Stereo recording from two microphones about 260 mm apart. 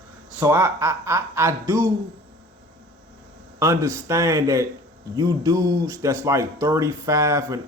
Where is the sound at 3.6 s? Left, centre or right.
Centre.